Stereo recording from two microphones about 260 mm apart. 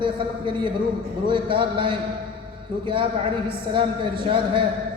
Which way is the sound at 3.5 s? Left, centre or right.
Centre.